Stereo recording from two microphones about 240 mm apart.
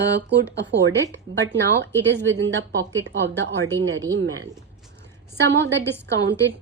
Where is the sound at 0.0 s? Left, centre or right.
Right.